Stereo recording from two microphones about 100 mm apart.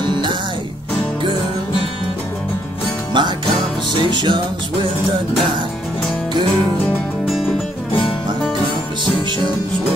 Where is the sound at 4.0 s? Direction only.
50° right (ahead or behind).